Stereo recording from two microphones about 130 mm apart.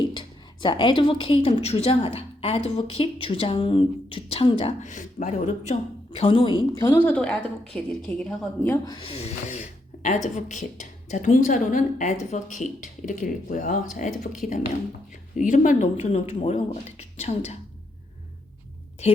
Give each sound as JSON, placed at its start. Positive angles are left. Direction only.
{"t": 0.0, "sound": "speech", "side_deg": 35}
{"t": 4.8, "sound": "a woman's voice", "side_deg": 70}
{"t": 6.1, "sound": "speech", "side_deg": 40}
{"t": 6.7, "sound": "a woman's voice", "side_deg": 20}
{"t": 8.6, "sound": "speech", "side_deg": 20}
{"t": 9.0, "sound": "a woman's voice", "side_deg": 50}
{"t": 15.4, "sound": "speech", "side_deg": 75}
{"t": 19.0, "sound": "speech", "side_deg": 55}